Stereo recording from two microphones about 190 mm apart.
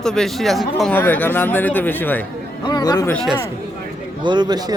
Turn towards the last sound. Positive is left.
turn(degrees=-20)  # may be behind; listen again after turning